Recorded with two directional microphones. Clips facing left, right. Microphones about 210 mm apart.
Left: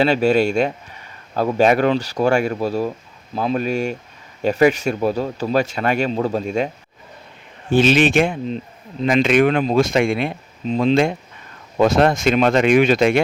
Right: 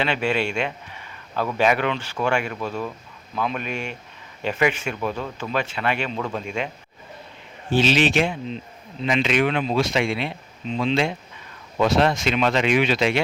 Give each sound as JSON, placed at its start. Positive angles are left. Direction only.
{"t": 0.0, "sound": "speech", "side_deg": 40}
{"t": 7.7, "sound": "speech", "side_deg": 50}